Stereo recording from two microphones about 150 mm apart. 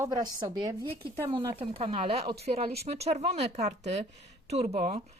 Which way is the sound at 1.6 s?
40° right (ahead or behind).